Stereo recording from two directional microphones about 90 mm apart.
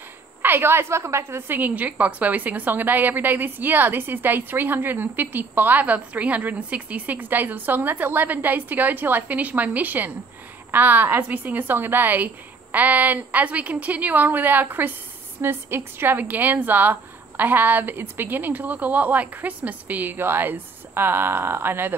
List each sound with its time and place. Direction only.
0.4 s a woman's voice: 25° right (ahead or behind)